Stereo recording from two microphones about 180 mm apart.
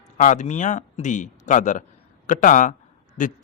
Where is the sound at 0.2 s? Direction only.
45° left (ahead or behind).